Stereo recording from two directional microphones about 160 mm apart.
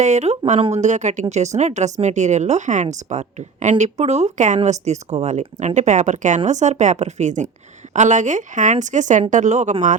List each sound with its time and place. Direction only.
0.0 s speech: 45° right (ahead or behind)